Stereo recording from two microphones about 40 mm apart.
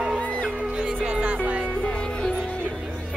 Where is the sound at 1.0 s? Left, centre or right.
Right.